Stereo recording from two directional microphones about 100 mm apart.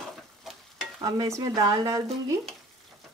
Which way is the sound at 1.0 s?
45° right (ahead or behind).